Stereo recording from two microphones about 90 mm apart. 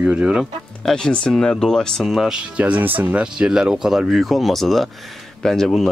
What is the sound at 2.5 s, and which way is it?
Speech, 15° right (ahead or behind).